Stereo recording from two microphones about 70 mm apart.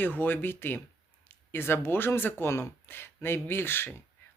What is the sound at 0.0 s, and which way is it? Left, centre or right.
Speech, left.